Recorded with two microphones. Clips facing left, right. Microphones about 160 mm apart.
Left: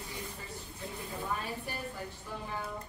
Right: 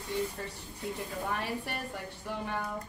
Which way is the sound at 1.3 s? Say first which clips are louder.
Right 3 dB; 70° right (ahead or behind).